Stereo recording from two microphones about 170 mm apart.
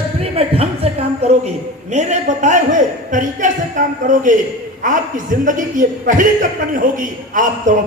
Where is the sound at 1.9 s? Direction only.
45° right (ahead or behind).